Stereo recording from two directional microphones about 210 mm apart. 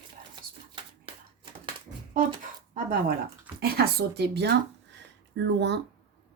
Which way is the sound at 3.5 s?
50° right (ahead or behind).